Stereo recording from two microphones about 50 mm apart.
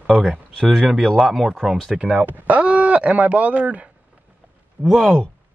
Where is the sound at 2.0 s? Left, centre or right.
Right.